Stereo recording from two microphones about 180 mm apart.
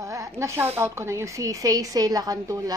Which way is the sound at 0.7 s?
15° right (ahead or behind).